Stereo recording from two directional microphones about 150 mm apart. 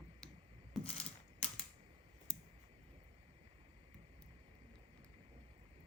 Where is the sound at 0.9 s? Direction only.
40° left (ahead or behind).